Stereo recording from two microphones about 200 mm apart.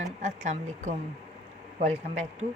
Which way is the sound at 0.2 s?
35° right (ahead or behind).